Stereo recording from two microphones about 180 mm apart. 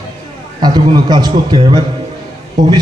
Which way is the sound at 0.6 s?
20° right (ahead or behind).